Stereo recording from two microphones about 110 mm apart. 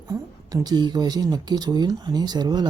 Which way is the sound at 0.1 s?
35° right (ahead or behind).